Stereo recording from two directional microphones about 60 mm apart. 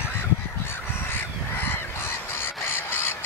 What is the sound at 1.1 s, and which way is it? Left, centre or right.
Crow, left.